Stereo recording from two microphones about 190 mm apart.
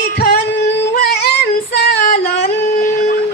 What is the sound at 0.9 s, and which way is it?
Female singing, 60° left (ahead or behind).